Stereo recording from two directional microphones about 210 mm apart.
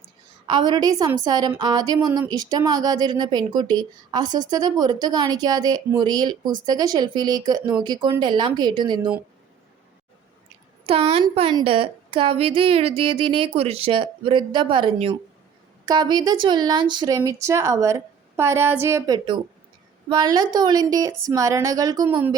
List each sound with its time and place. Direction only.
0.4 s speech: 20° right (ahead or behind)
10.8 s speech: 25° right (ahead or behind)